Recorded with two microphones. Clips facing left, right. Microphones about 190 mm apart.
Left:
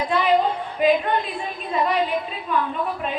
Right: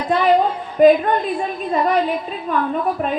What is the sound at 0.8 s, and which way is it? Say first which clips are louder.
A woman's voice: right 7 dB; 45° right (ahead or behind).